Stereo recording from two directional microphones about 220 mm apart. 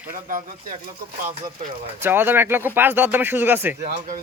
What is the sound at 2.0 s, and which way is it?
A man's voice, 10° right (ahead or behind).